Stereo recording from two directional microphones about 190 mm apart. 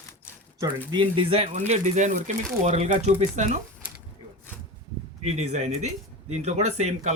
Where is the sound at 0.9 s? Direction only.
25° right (ahead or behind).